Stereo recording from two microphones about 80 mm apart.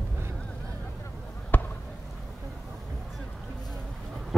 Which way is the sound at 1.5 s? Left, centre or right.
Left.